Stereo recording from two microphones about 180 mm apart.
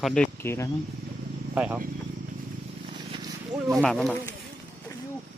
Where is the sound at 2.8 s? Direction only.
25° right (ahead or behind).